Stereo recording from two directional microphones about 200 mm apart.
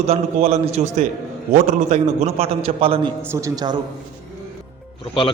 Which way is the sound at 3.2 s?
15° right (ahead or behind).